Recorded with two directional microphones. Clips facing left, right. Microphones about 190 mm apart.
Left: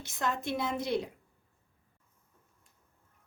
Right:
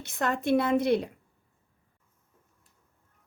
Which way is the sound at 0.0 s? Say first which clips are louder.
Right 5 dB; 60° right (ahead or behind).